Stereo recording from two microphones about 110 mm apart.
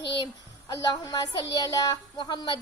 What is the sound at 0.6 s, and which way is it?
A woman's voice, 30° left (ahead or behind).